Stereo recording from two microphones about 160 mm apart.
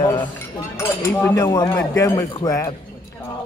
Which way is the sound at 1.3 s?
25° left (ahead or behind).